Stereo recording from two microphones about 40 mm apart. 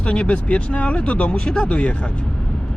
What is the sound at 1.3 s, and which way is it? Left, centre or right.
Speech, centre.